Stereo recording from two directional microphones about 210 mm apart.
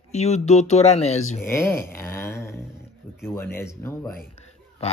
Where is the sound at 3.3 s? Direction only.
10° left (ahead or behind).